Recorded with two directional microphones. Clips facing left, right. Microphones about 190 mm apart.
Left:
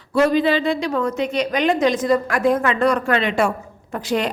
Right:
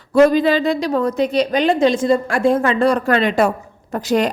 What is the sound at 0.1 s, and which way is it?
Speech, 45° right (ahead or behind).